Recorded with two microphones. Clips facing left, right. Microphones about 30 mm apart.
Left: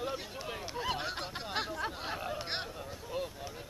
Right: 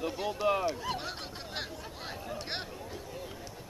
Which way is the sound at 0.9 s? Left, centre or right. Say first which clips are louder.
Left 1 dB; centre.